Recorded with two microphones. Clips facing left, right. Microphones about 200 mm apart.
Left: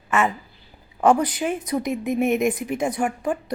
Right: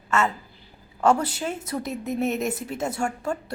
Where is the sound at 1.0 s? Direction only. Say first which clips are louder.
Left 3 dB; 15° left (ahead or behind).